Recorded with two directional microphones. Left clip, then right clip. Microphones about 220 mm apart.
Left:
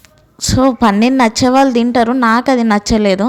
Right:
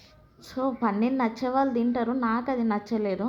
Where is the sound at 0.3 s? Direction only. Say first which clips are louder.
Left 17 dB; 45° left (ahead or behind).